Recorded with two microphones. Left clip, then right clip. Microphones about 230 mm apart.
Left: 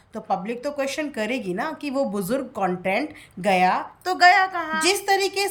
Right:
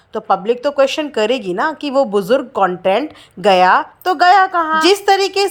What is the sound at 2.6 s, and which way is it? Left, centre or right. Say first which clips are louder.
Speech: right 9 dB; right.